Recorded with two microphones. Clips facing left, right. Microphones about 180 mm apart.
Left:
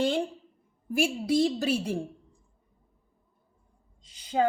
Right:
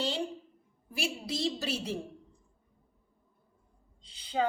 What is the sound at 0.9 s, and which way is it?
A woman's voice, 50° left (ahead or behind).